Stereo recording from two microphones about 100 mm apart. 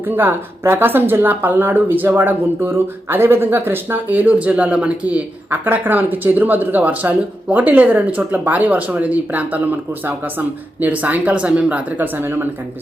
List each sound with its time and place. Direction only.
0.1 s speech: 20° right (ahead or behind)